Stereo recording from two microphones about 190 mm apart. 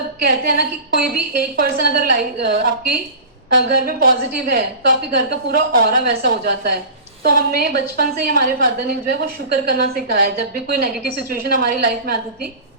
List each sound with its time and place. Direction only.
0.2 s a woman's voice: 50° right (ahead or behind)